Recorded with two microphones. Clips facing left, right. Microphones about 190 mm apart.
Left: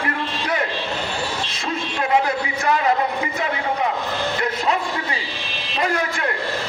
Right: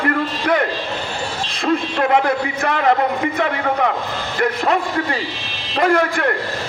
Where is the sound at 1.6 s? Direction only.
55° right (ahead or behind).